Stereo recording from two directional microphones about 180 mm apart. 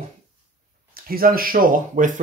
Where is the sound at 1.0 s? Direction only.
55° right (ahead or behind).